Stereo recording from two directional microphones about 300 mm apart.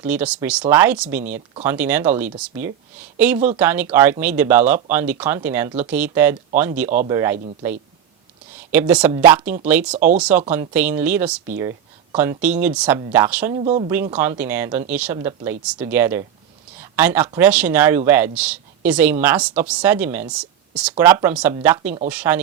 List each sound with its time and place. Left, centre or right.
0.0 s speech: centre
8.5 s speech: centre
13.7 s speech: centre
14.1 s speech: centre